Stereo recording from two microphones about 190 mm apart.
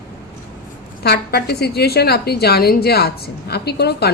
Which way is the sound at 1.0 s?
55° left (ahead or behind).